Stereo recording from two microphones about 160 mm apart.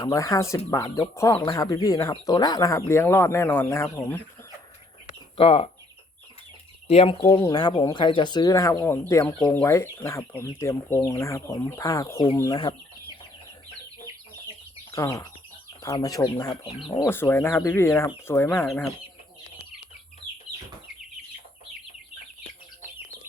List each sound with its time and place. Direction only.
0.0 s speech: 20° left (ahead or behind)
5.4 s speech: 35° left (ahead or behind)
6.8 s speech: 40° left (ahead or behind)
7.3 s speech: 25° left (ahead or behind)
14.9 s speech: 20° left (ahead or behind)
17.1 s speech: 15° left (ahead or behind)